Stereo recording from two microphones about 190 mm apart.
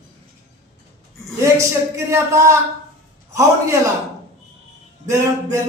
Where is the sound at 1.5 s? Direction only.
15° right (ahead or behind).